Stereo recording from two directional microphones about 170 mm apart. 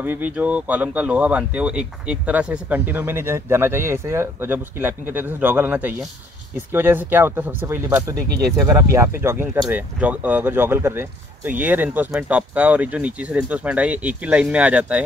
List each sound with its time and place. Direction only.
0.0 s speech: 10° right (ahead or behind)